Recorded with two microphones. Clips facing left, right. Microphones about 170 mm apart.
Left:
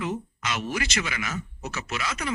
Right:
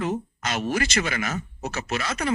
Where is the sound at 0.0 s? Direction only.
45° right (ahead or behind).